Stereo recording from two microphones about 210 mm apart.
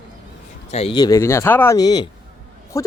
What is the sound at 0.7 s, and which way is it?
Speech, 25° left (ahead or behind).